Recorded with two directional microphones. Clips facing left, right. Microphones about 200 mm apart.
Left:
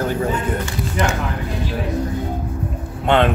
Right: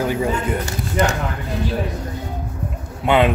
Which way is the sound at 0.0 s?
10° right (ahead or behind).